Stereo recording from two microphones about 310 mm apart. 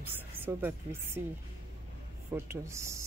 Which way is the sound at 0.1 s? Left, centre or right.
Centre.